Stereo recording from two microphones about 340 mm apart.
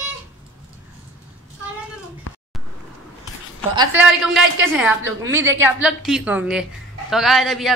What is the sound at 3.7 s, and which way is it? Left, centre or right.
A woman's voice, centre.